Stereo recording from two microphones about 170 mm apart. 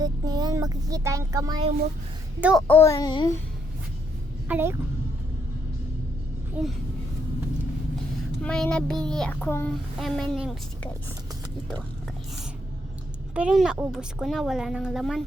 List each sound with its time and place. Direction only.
0.0 s speech: 25° right (ahead or behind)
2.4 s a child's voice: 5° right (ahead or behind)
2.6 s a child's voice: 15° left (ahead or behind)
4.4 s speech: 10° right (ahead or behind)
6.6 s speech: 5° right (ahead or behind)
8.4 s a child's voice: 5° left (ahead or behind)
10.0 s a child's voice: centre (ahead or behind)
13.3 s a child's voice: 5° right (ahead or behind)